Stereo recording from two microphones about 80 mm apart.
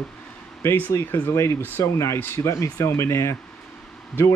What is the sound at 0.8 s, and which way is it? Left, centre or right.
Speech, left.